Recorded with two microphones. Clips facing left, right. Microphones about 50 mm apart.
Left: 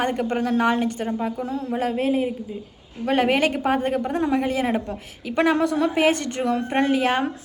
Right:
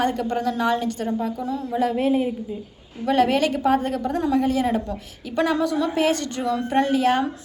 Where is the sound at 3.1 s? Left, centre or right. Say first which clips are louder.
Right 1 dB; left.